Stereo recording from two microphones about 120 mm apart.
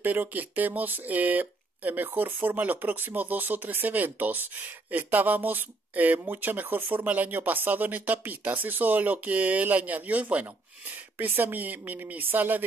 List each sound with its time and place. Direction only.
0.0 s speech: 15° right (ahead or behind)